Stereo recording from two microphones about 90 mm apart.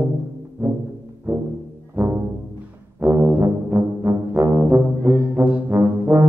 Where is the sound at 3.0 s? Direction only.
30° right (ahead or behind).